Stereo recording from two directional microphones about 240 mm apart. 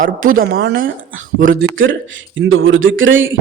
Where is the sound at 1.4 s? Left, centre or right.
Right.